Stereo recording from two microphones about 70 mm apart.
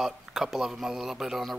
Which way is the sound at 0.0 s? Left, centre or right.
Centre.